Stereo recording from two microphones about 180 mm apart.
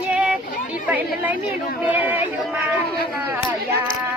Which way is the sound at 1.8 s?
10° right (ahead or behind).